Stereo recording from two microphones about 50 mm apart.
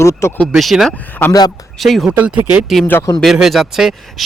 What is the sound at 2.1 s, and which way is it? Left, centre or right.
Speech, right.